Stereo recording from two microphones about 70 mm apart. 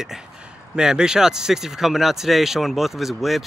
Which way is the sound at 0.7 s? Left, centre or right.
Centre.